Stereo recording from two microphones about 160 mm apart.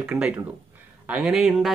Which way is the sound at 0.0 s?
10° right (ahead or behind).